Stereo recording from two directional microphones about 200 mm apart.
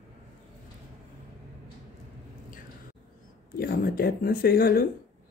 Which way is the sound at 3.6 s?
50° left (ahead or behind).